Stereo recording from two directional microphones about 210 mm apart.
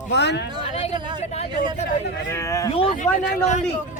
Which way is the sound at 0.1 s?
55° left (ahead or behind).